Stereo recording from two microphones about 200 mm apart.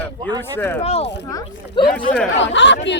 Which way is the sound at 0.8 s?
30° left (ahead or behind).